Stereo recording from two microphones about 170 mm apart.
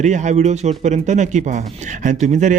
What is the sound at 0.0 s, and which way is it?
A man's voice, 45° right (ahead or behind).